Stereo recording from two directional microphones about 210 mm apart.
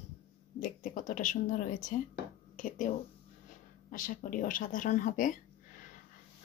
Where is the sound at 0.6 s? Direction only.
40° left (ahead or behind).